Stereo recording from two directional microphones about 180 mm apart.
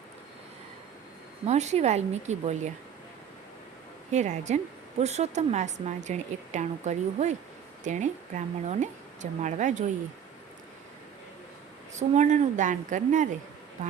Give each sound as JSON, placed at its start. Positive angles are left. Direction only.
{"t": 1.5, "sound": "speech", "side_deg": -40}
{"t": 4.1, "sound": "speech", "side_deg": -40}
{"t": 11.9, "sound": "speech", "side_deg": -40}